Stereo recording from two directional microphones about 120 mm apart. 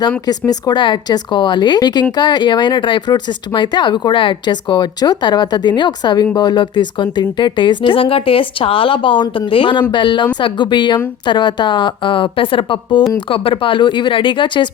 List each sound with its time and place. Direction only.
0.3 s speech: 35° left (ahead or behind)